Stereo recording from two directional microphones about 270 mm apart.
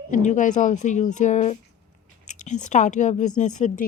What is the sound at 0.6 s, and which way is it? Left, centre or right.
A woman's voice, left.